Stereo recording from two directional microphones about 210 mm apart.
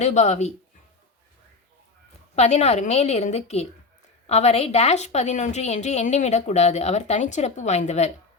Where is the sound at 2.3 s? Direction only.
30° left (ahead or behind).